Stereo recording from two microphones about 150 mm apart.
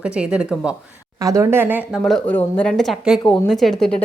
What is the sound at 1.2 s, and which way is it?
Speech, 20° right (ahead or behind).